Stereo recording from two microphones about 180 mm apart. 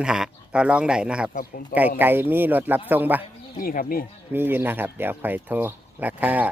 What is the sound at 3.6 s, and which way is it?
Speech, 55° left (ahead or behind).